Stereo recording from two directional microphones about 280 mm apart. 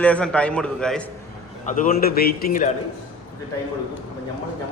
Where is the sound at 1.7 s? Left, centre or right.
Left.